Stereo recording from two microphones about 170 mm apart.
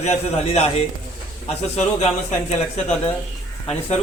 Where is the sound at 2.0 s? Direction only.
40° left (ahead or behind).